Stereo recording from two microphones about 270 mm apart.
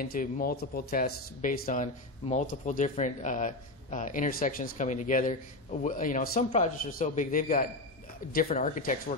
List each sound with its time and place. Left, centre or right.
0.0 s speech: left